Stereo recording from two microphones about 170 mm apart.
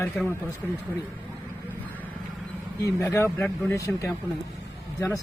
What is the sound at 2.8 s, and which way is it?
Speech, 20° left (ahead or behind).